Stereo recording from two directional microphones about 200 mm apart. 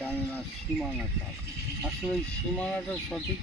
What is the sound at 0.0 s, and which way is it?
Bird, 10° left (ahead or behind).